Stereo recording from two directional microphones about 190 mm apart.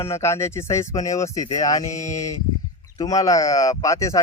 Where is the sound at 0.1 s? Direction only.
15° left (ahead or behind).